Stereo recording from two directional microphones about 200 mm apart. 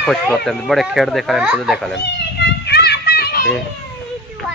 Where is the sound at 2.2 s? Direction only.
55° left (ahead or behind).